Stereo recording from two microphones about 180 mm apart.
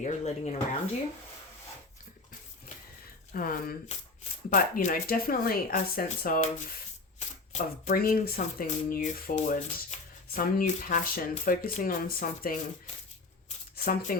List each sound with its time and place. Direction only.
0.0 s speech: 40° left (ahead or behind)
3.3 s speech: 50° left (ahead or behind)
13.7 s speech: 55° left (ahead or behind)